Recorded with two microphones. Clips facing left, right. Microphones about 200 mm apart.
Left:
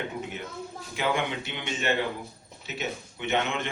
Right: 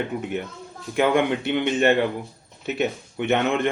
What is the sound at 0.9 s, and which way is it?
A man's voice, 55° right (ahead or behind).